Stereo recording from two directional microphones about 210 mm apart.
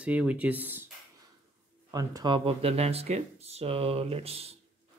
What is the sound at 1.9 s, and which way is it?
Speech, 20° right (ahead or behind).